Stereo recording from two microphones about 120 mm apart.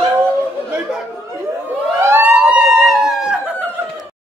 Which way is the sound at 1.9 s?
20° right (ahead or behind).